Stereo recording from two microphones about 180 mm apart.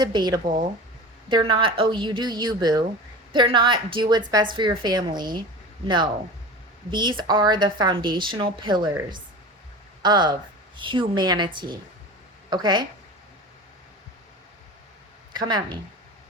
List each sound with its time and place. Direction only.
0.0 s speech: 25° right (ahead or behind)
6.9 s speech: 25° right (ahead or behind)
15.3 s speech: 25° right (ahead or behind)